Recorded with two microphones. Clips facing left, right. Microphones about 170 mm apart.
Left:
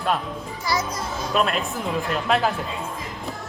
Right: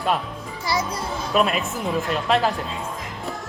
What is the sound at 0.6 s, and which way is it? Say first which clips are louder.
Speech: right 1 dB; 30° right (ahead or behind).